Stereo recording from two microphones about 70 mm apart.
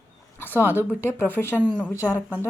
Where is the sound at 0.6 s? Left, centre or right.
Left.